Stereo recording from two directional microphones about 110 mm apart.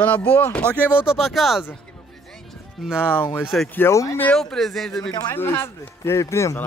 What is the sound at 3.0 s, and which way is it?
Speech, 10° left (ahead or behind).